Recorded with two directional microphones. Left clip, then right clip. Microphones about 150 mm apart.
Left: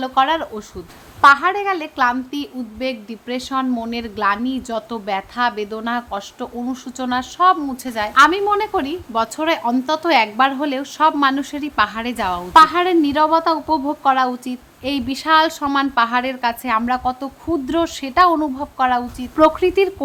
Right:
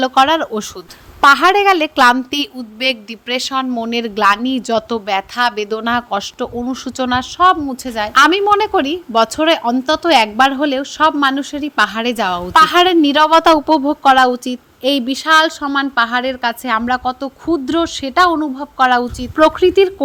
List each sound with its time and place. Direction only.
0.0 s a woman's voice: 45° right (ahead or behind)
1.2 s a woman's voice: 80° right; by 8.1 s 30° right (ahead or behind)
8.1 s a woman's voice: 50° right (ahead or behind)
12.5 s a woman's voice: 55° right (ahead or behind)
13.7 s a woman's voice: 40° right (ahead or behind); by 18.7 s 20° right (ahead or behind)
18.8 s a woman's voice: 35° right (ahead or behind)